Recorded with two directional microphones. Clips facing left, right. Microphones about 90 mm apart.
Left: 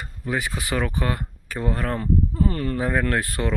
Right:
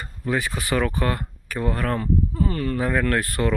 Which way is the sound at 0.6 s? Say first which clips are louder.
Right 2 dB; 15° left (ahead or behind).